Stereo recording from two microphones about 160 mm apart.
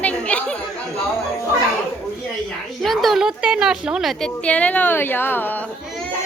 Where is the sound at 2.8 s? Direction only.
Centre (ahead or behind).